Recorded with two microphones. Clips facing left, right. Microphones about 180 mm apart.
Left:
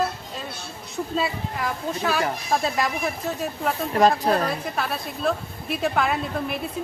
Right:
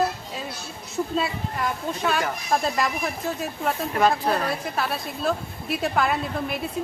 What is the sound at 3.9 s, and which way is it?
Speech, 40° left (ahead or behind).